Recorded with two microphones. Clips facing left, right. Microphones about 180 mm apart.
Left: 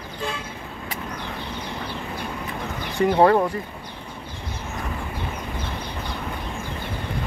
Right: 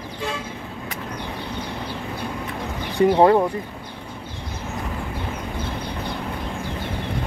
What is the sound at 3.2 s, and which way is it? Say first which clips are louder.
Speech: even; 20° right (ahead or behind).